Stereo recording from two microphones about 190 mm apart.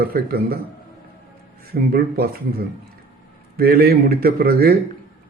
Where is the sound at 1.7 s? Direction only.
55° right (ahead or behind).